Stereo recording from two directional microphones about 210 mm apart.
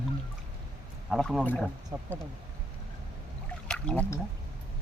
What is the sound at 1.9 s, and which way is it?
Speech, 15° right (ahead or behind).